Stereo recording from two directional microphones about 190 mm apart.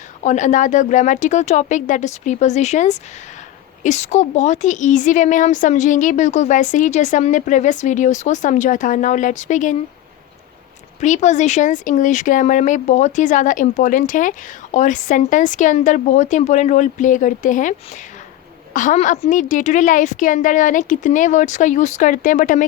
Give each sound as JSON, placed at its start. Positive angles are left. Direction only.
{"t": 0.2, "sound": "speech", "side_deg": 40}
{"t": 11.0, "sound": "a woman's voice", "side_deg": 40}